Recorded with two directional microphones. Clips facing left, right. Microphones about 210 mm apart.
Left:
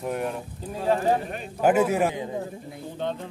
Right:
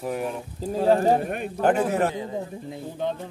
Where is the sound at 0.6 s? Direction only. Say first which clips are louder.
Right 5 dB; 35° right (ahead or behind).